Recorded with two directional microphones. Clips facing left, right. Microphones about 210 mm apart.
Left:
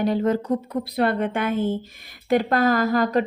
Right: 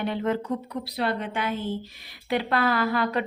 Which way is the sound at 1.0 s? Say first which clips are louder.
Left 6 dB; 55° left (ahead or behind).